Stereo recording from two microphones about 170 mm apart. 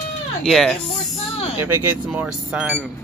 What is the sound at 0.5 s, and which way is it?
Speech, 5° left (ahead or behind).